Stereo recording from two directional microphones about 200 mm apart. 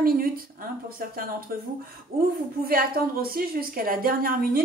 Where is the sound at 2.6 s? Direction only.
50° right (ahead or behind).